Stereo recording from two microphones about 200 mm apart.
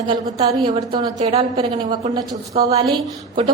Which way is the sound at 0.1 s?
25° right (ahead or behind).